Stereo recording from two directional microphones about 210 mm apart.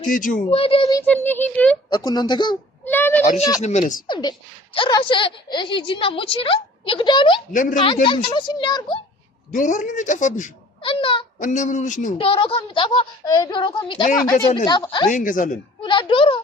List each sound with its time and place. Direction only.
0.0 s speech: 40° left (ahead or behind)
0.5 s a child's voice: 25° left (ahead or behind); by 1.8 s 10° left (ahead or behind)
1.9 s a woman's voice: 20° left (ahead or behind)
2.8 s a sound: 10° left (ahead or behind)
3.6 s speech: 35° left (ahead or behind)
4.0 s a woman's voice: 20° left (ahead or behind)
7.5 s speech: 40° left (ahead or behind)
8.0 s a woman's voice: 20° left (ahead or behind)
9.5 s speech: 35° left (ahead or behind)
10.8 s a child's voice: 25° left (ahead or behind)
11.3 s speech: 35° left (ahead or behind)
12.1 s a woman's voice: 25° left (ahead or behind)
15.1 s speech: 40° left (ahead or behind)
15.8 s a woman's voice: 20° left (ahead or behind)